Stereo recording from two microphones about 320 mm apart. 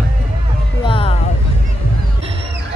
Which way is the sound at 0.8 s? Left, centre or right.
Centre.